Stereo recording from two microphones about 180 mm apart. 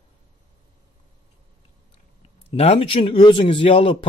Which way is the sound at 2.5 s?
35° left (ahead or behind).